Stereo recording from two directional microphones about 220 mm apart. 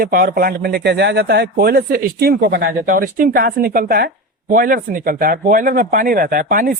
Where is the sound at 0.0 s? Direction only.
40° right (ahead or behind).